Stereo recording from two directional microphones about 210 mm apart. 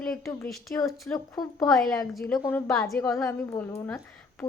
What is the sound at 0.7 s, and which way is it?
A woman's voice, 10° left (ahead or behind).